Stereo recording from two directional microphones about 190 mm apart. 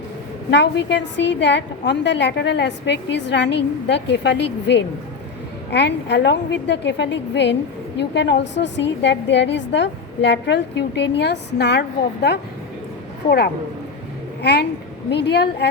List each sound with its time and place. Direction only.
0.5 s a woman's voice: 70° left (ahead or behind)
14.4 s a woman's voice: 60° left (ahead or behind)